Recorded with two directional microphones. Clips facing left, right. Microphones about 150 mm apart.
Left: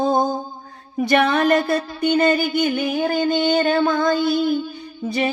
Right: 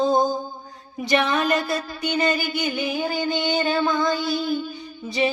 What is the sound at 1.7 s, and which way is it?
Music, 25° left (ahead or behind).